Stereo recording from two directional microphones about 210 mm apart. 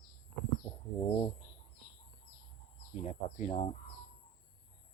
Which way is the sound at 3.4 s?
30° left (ahead or behind).